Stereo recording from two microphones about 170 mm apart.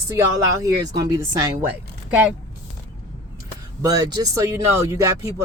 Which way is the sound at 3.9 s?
20° right (ahead or behind).